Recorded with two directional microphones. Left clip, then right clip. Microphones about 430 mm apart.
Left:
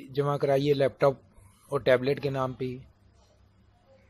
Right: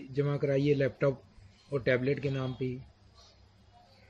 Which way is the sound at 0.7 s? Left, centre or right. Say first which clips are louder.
Left 6 dB; centre.